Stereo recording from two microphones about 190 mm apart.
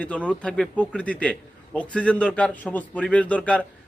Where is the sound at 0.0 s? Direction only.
5° left (ahead or behind).